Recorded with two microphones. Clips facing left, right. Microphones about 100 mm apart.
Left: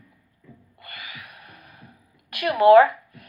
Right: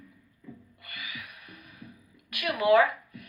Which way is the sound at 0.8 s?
40° left (ahead or behind).